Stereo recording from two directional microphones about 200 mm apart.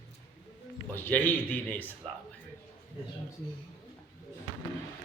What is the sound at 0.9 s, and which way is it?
Speech, 10° left (ahead or behind).